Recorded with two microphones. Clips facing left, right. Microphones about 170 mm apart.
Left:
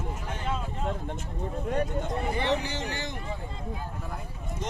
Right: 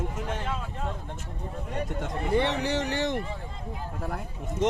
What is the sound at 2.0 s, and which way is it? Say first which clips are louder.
A man's voice: right 4 dB; 65° right (ahead or behind).